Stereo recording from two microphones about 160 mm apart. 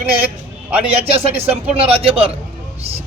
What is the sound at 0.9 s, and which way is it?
Speech, 40° right (ahead or behind).